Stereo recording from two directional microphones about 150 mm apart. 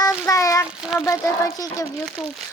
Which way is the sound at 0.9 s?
20° left (ahead or behind).